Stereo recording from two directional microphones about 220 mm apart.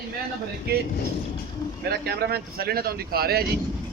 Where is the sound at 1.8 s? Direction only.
45° right (ahead or behind).